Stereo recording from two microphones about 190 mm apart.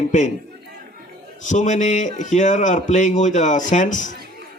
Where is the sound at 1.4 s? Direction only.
40° left (ahead or behind).